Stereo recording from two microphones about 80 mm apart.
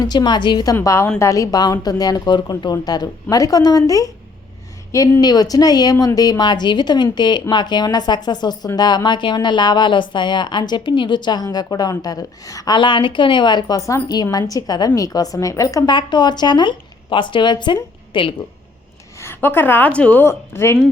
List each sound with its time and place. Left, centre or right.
0.0 s speech: left
1.2 s a woman's voice: left
2.7 s a woman's voice: left
5.2 s a woman's voice: left
12.7 s a woman's voice: left
13.7 s a woman's voice: left
14.1 s a woman's voice: left
15.9 s a woman's voice: left
18.1 s speech: left
19.2 s a woman's voice: left
19.9 s speech: centre
20.2 s a woman's voice: left